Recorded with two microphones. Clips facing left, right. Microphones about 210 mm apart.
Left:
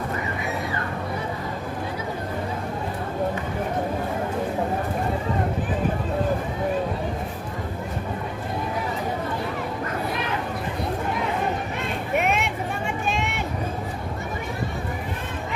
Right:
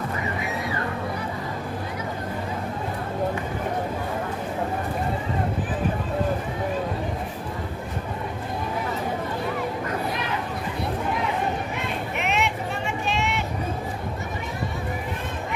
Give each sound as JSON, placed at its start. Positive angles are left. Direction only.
{"t": 12.1, "sound": "vehicle", "side_deg": 50}